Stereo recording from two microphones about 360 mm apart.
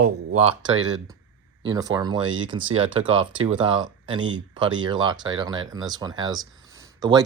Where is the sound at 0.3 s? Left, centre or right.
Centre.